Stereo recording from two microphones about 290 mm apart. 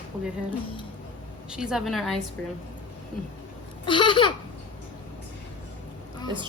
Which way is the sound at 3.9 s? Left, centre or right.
Centre.